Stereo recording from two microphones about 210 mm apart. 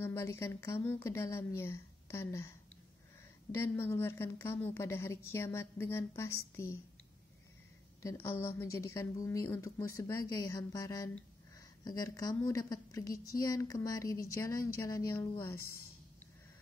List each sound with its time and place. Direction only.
0.0 s a woman's voice: 15° left (ahead or behind)
3.5 s a woman's voice: 10° left (ahead or behind)
8.0 s a woman's voice: 15° left (ahead or behind)